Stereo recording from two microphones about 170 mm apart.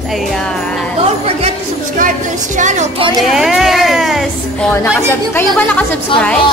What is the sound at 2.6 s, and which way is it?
Speech, 45° right (ahead or behind).